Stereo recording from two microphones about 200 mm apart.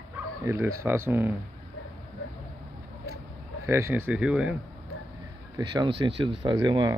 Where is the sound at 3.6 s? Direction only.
10° right (ahead or behind).